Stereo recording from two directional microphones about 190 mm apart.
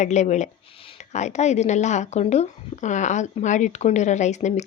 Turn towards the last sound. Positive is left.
turn(degrees=40)  # may be behind; listen again after turning